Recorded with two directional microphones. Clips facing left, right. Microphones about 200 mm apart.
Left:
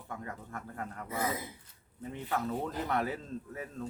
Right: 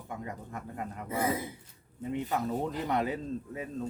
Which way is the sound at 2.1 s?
15° right (ahead or behind).